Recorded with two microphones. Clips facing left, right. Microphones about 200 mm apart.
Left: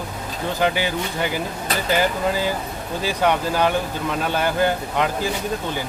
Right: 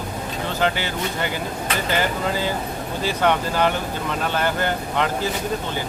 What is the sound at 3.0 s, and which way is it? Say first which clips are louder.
Speech: even; 10° left (ahead or behind).